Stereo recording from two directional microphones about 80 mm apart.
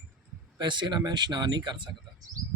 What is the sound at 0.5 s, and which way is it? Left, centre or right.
Speech, right.